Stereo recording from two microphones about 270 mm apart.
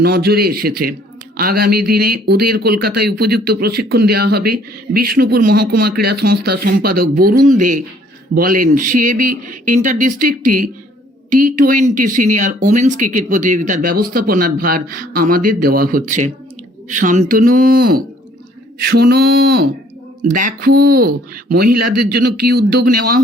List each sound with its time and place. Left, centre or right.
0.0 s speech: right
21.8 s speech: right
22.1 s speech: right